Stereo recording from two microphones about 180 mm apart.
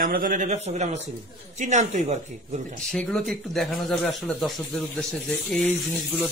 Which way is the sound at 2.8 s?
5° left (ahead or behind).